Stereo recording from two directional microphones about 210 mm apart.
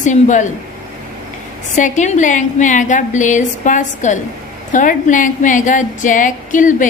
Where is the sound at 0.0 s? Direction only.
35° left (ahead or behind).